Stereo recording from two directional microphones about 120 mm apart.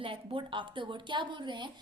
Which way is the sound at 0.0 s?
45° right (ahead or behind).